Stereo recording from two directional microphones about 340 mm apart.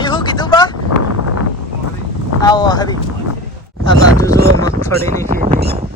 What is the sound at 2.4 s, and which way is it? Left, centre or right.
Speech, centre.